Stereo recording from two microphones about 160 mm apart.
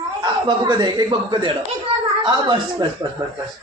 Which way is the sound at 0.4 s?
30° right (ahead or behind).